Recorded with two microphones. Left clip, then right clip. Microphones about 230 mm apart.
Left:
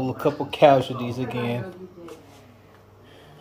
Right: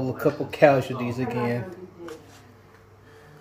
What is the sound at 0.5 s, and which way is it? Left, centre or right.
Speech, left.